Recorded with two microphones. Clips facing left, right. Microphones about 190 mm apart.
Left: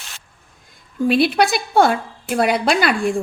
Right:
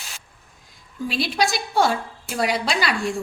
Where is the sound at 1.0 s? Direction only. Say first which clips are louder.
Left 8 dB; 60° left (ahead or behind).